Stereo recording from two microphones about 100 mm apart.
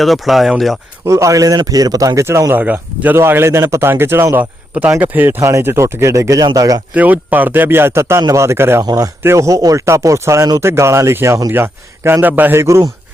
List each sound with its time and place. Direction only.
0.0 s speech: centre (ahead or behind)
1.0 s speech: 30° right (ahead or behind)
6.9 s speech: 15° right (ahead or behind)
8.8 s speech: 40° right (ahead or behind)
9.2 s speech: 30° right (ahead or behind)